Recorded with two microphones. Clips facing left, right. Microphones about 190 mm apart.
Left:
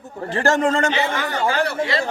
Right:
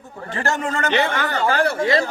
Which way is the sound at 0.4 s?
35° left (ahead or behind).